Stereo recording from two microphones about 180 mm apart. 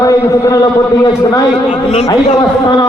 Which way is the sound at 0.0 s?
20° left (ahead or behind).